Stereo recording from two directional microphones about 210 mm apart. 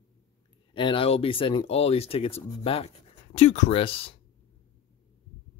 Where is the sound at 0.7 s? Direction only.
25° left (ahead or behind).